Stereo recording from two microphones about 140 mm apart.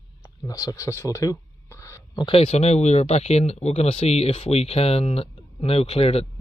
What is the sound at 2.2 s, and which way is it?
Speech, 45° left (ahead or behind).